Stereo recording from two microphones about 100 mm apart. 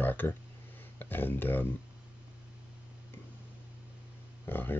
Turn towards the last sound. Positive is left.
turn(degrees=20)  # may be behind; listen again after turning